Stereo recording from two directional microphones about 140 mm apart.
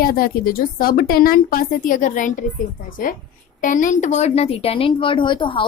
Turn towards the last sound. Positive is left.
turn(degrees=35)  # may be behind; listen again after turning